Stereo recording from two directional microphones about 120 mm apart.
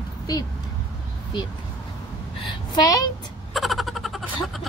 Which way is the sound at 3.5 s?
Centre (ahead or behind).